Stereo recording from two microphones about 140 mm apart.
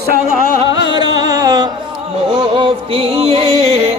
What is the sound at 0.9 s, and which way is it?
Music, 30° right (ahead or behind).